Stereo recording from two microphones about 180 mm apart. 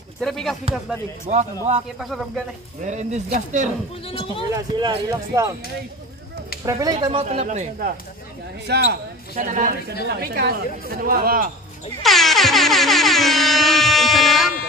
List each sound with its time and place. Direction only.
0.2 s speech: centre (ahead or behind)
1.2 s speech: 40° right (ahead or behind)
2.0 s speech: centre (ahead or behind)
2.8 s speech: 40° right (ahead or behind)
4.6 s speech: 20° right (ahead or behind)
6.6 s speech: 20° right (ahead or behind)
7.2 s speech: 40° right (ahead or behind)
8.6 s speech: 65° right (ahead or behind)
9.3 s speech: 45° right (ahead or behind)
10.0 s speech: 60° right (ahead or behind)
12.0 s air horn: centre (ahead or behind)